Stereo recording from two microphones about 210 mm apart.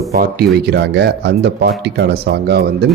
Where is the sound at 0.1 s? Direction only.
50° right (ahead or behind).